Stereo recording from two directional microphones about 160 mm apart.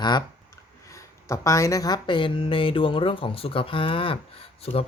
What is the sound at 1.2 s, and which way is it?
Speech, 20° left (ahead or behind).